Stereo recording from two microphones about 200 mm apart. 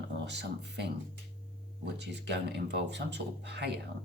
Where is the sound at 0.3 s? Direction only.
60° right (ahead or behind).